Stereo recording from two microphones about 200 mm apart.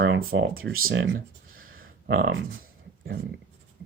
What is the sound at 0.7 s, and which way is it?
Speech, 90° right.